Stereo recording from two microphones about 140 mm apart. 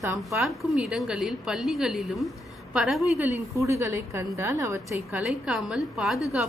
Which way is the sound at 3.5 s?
20° right (ahead or behind).